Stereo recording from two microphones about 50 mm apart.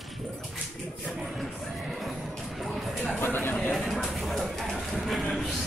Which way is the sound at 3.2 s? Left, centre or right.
Left.